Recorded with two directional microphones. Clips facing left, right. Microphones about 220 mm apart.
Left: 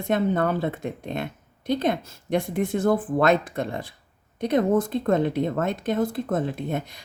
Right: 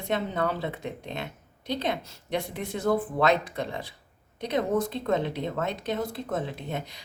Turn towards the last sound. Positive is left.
turn(degrees=50)  # may be behind; listen again after turning